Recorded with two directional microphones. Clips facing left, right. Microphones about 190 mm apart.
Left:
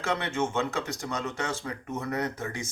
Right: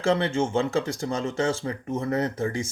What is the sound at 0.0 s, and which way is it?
Speech, 30° right (ahead or behind).